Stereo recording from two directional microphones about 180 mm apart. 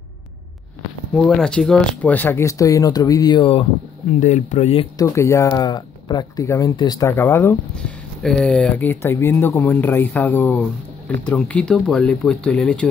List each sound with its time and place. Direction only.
1.1 s speech: 5° left (ahead or behind); by 3.6 s 25° left (ahead or behind)
4.2 s speech: 40° left (ahead or behind)
4.9 s speech: 15° left (ahead or behind)